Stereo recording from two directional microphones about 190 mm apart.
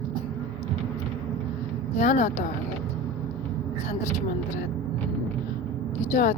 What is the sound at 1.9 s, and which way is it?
Speech, 40° left (ahead or behind).